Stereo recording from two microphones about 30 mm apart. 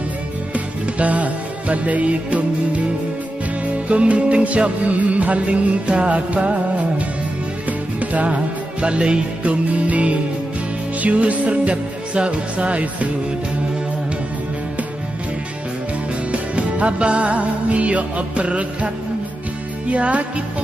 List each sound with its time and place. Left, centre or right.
0.9 s music: right
3.9 s music: right
7.6 s music: right
8.8 s music: right
9.4 s music: right
11.0 s speech: right
16.3 s music: right
19.9 s music: right